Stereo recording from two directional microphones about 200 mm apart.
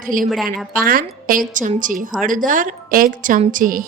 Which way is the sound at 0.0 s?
45° right (ahead or behind).